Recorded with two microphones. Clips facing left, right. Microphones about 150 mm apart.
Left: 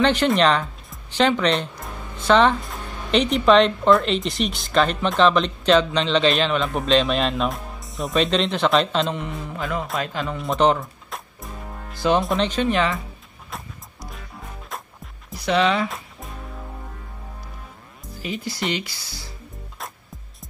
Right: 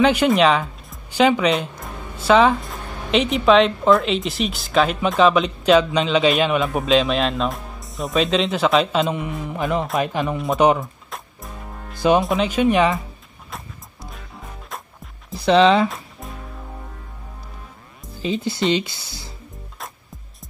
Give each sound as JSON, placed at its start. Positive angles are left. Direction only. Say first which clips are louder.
{"t": 0.0, "sound": "speech", "louder": "right 2 dB", "side_deg": -10}
{"t": 10.3, "sound": "speech", "louder": "right 2 dB", "side_deg": 0}
{"t": 12.2, "sound": "speech", "louder": "right 3 dB", "side_deg": -5}
{"t": 15.3, "sound": "speech", "louder": "right 6 dB", "side_deg": -30}
{"t": 15.9, "sound": "music", "louder": "right 1 dB", "side_deg": 0}
{"t": 18.2, "sound": "speech", "louder": "right 6 dB", "side_deg": -25}